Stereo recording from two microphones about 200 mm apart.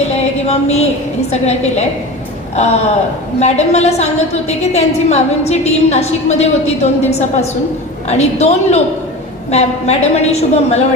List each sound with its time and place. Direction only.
0.4 s a woman's voice: 35° left (ahead or behind)
3.4 s a woman's voice: 35° left (ahead or behind)